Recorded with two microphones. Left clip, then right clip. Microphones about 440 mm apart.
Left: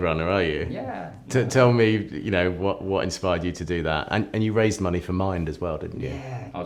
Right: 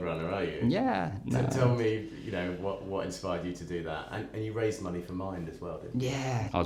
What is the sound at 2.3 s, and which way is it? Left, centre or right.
Speech, left.